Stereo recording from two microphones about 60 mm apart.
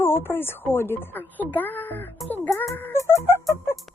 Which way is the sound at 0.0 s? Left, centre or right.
Left.